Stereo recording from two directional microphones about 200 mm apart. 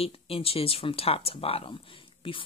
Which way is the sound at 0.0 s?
30° left (ahead or behind).